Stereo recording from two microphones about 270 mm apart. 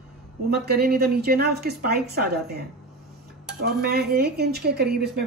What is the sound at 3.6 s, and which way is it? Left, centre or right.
A woman's voice, right.